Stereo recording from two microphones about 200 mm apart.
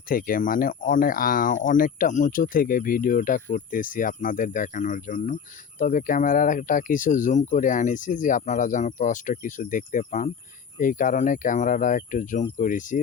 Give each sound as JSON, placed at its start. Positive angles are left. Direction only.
{"t": 0.1, "sound": "speech", "side_deg": 45}